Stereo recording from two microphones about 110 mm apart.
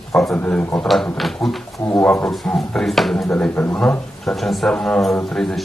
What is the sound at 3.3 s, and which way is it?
A man's voice, 15° left (ahead or behind).